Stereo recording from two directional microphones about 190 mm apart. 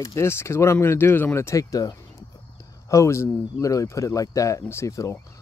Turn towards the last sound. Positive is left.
turn(degrees=15)  # may be behind; listen again after turning